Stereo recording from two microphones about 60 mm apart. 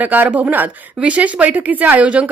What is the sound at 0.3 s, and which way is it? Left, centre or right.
A woman's voice, centre.